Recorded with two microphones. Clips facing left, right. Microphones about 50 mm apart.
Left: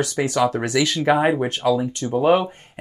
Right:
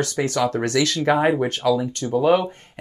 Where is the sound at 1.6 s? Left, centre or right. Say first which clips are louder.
Even; left.